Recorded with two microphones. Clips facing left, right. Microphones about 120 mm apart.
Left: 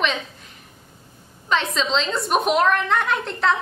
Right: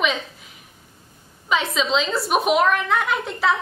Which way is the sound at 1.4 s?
5° right (ahead or behind).